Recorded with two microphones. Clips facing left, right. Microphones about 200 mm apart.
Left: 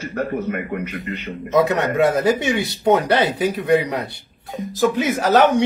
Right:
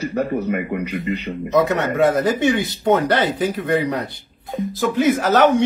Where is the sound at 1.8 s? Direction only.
15° left (ahead or behind).